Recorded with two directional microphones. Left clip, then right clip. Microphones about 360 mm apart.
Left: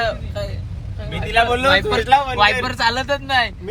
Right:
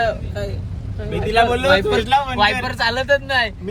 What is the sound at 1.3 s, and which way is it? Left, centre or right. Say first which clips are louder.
Speech: even; centre.